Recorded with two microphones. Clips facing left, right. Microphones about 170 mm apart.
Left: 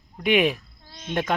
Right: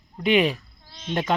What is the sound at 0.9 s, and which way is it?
Cricket, 50° left (ahead or behind).